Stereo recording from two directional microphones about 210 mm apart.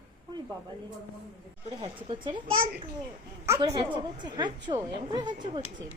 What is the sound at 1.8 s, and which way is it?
Speech, 25° right (ahead or behind).